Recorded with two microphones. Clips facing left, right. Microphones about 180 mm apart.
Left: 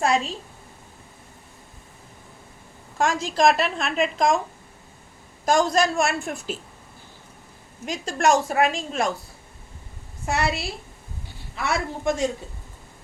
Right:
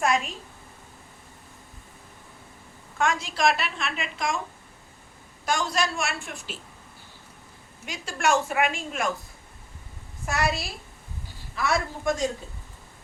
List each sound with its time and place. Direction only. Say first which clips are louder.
0.0 s a woman's voice: left 3 dB; 30° left (ahead or behind)
3.2 s a woman's voice: left 5 dB; 40° left (ahead or behind)
5.5 s a woman's voice: left 7 dB; 45° left (ahead or behind)
7.9 s a woman's voice: left 5 dB; 40° left (ahead or behind)
10.2 s a man's voice: left 2 dB; 30° left (ahead or behind)